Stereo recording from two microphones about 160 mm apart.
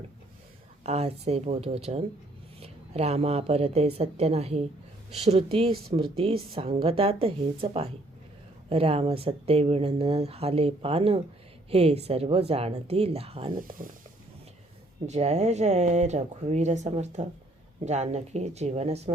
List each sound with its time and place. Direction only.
0.9 s speech: 40° right (ahead or behind)
13.5 s speech: 60° right (ahead or behind)
15.0 s speech: 45° right (ahead or behind)